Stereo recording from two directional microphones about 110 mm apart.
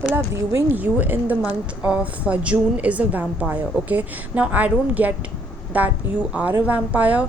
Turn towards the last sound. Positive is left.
turn(degrees=-15)  # may be behind; listen again after turning